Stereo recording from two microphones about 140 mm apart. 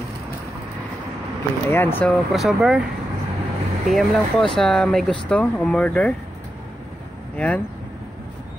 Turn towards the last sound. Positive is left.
turn(degrees=10)  # may be behind; listen again after turning